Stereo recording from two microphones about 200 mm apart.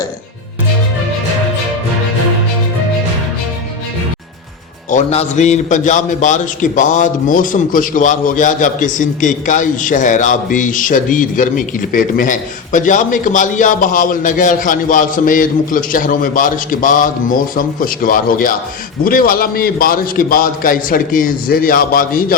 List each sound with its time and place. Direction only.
4.9 s a man's voice: 35° left (ahead or behind)